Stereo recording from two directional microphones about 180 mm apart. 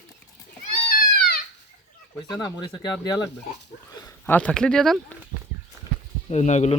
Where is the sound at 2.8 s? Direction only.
20° left (ahead or behind).